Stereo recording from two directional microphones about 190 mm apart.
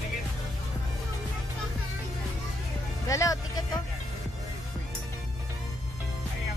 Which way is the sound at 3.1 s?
15° left (ahead or behind).